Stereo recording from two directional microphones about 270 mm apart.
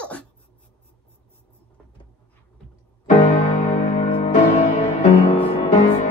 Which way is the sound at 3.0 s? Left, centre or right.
Left.